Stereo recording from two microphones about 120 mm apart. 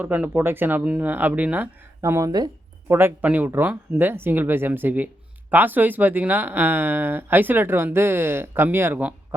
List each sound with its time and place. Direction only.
0.0 s speech: 15° right (ahead or behind)
2.0 s speech: 25° right (ahead or behind)
2.9 s speech: 15° right (ahead or behind)